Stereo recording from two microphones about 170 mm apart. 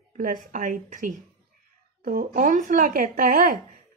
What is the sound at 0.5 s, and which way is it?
Speech, 50° right (ahead or behind).